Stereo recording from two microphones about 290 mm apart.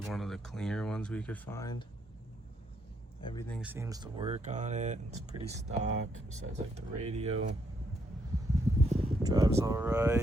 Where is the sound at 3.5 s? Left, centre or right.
Centre; by 5.9 s right.